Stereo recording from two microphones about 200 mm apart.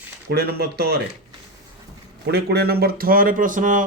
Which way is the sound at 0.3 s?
50° right (ahead or behind).